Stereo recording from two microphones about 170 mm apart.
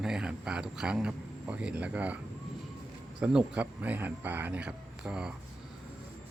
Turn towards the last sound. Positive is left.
turn(degrees=-5)  # may be behind; listen again after turning